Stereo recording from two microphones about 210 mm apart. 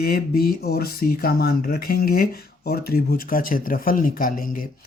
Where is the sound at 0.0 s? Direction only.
45° left (ahead or behind).